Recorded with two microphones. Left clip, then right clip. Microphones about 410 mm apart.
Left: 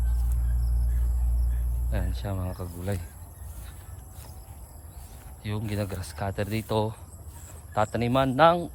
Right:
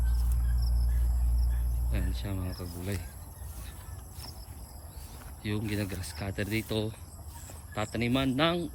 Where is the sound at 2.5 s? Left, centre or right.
Left.